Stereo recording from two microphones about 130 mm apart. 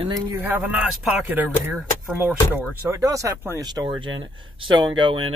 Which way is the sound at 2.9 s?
25° right (ahead or behind).